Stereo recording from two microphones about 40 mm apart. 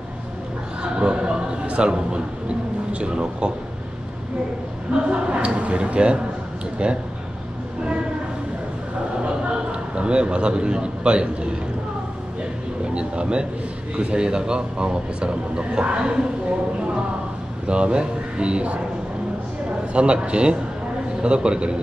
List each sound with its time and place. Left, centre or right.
0.9 s a man's voice: right
4.9 s speech: right
9.3 s a sound: right
12.9 s speech: right
19.9 s speech: right